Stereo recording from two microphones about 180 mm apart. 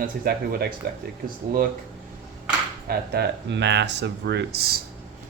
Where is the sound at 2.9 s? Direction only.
65° right (ahead or behind).